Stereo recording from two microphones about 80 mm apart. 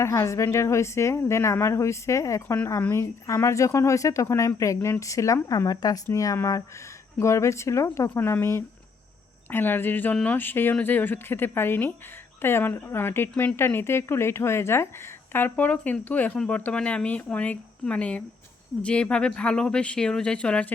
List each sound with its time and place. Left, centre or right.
0.0 s speech: left
6.1 s a woman's voice: left; by 20.7 s centre